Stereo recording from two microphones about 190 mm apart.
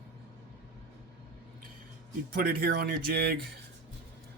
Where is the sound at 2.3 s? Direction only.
55° right (ahead or behind).